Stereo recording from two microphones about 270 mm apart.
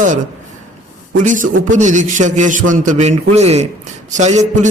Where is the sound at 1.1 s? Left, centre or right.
Right.